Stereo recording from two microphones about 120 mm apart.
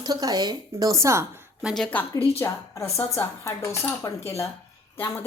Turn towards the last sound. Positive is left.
turn(degrees=20)  # may be behind; listen again after turning